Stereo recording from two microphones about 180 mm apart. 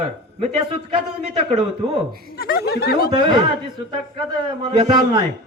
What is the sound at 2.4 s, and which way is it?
Speech, 60° left (ahead or behind).